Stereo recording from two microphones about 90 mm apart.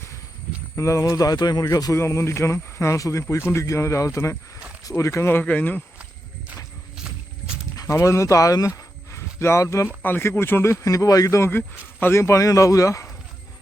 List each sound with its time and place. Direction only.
0.8 s speech: 35° left (ahead or behind)
2.0 s speech: 30° left (ahead or behind)
7.8 s speech: 35° left (ahead or behind)
10.0 s speech: 25° left (ahead or behind)